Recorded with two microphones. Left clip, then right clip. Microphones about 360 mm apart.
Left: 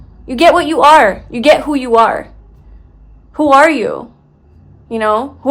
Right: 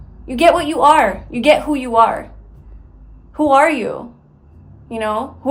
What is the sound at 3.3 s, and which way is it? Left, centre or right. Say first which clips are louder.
A woman's voice: left 4 dB; left.